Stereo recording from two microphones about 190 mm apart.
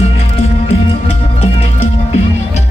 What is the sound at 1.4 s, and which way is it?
Music, 30° left (ahead or behind).